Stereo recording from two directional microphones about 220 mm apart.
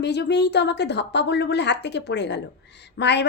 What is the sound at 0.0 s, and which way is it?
A woman's voice, 50° left (ahead or behind).